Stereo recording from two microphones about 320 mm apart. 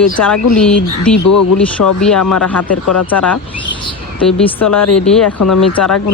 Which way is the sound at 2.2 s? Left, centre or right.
Left.